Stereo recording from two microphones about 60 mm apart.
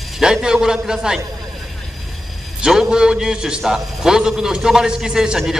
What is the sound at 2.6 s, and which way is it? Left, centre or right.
A man's voice, centre.